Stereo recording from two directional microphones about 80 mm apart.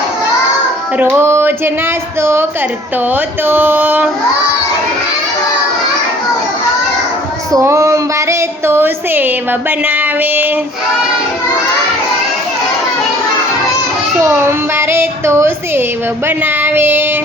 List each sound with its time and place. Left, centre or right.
0.9 s a woman's voice: right
7.6 s speech: right
14.2 s speech: right